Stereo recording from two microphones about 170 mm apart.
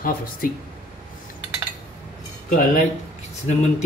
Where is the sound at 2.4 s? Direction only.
50° left (ahead or behind).